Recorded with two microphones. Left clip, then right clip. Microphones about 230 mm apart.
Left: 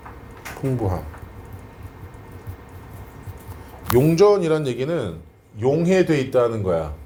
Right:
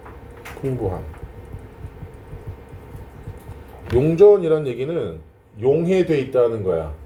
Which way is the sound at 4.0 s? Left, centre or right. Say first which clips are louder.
Right 3 dB; left.